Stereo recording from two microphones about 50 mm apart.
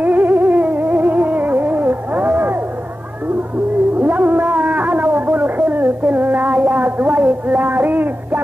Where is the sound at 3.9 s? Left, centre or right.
Right.